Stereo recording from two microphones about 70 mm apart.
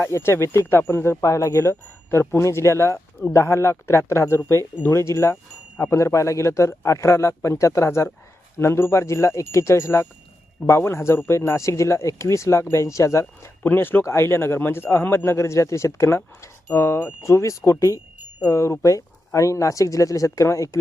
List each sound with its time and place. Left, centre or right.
0.0 s a man's voice: left
1.2 s a man's voice: left
13.6 s a man's voice: left
17.2 s a man's voice: left